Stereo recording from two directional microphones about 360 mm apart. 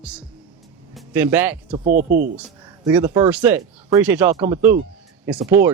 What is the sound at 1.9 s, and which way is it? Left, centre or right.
Speech, right.